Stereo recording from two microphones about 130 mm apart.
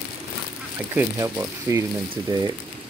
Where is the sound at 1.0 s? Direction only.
25° right (ahead or behind).